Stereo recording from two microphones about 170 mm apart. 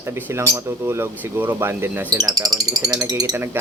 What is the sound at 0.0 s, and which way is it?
Speech, 15° right (ahead or behind).